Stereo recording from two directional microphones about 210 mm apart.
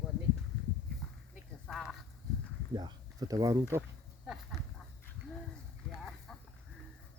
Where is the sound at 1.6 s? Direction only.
Centre (ahead or behind).